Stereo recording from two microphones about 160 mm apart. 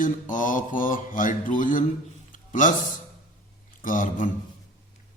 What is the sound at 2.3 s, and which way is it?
Music, 55° left (ahead or behind).